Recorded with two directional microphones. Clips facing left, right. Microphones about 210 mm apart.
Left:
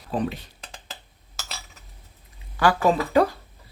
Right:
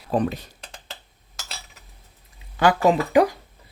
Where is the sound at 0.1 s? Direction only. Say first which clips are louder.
Right 4 dB; 45° right (ahead or behind).